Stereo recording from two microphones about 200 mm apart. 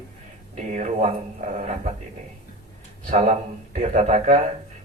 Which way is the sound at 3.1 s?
35° right (ahead or behind).